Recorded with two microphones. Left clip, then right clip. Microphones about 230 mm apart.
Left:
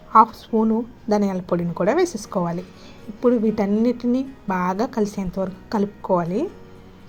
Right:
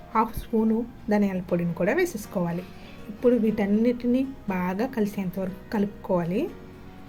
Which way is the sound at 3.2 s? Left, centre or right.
Centre.